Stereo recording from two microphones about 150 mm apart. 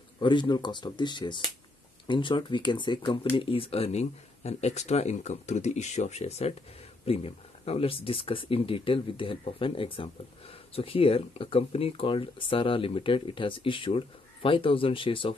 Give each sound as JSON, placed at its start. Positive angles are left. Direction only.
{"t": 0.2, "sound": "speech", "side_deg": 30}